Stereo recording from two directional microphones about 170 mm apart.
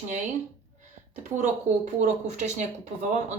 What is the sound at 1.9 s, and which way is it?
Speech, 45° right (ahead or behind).